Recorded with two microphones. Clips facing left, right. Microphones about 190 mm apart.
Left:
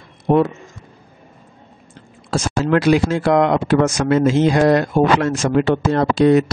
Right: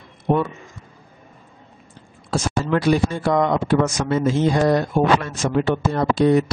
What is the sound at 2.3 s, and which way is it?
Speech, 90° left.